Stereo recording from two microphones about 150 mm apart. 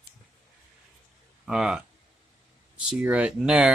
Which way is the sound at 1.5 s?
5° right (ahead or behind).